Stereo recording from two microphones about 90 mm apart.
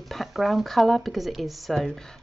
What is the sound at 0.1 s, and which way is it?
A woman's voice, centre (ahead or behind).